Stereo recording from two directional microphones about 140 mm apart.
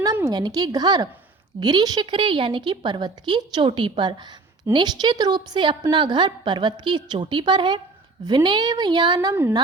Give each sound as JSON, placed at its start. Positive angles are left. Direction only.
{"t": 0.3, "sound": "a woman's voice", "side_deg": -30}
{"t": 9.3, "sound": "speech", "side_deg": -15}